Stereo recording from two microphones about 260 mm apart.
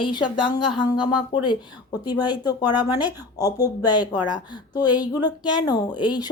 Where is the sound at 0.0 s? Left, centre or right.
Centre.